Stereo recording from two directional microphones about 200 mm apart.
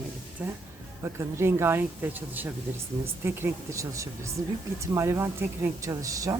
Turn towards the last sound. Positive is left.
turn(degrees=-15)  # may be behind; listen again after turning